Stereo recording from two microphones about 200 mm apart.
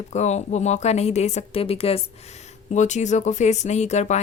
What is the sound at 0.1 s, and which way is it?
A woman's voice, 35° left (ahead or behind).